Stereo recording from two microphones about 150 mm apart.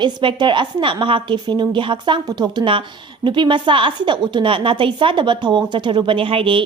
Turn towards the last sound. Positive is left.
turn(degrees=-35)  # may be behind; listen again after turning